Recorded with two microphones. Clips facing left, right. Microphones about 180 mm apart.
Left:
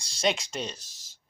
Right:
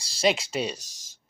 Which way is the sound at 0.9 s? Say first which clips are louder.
Right 2 dB; 45° right (ahead or behind).